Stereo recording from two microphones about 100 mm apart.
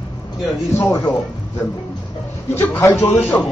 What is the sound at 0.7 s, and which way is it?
Speech, 25° left (ahead or behind).